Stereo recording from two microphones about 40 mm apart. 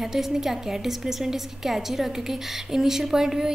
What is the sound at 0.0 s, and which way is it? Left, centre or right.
A woman's voice, centre.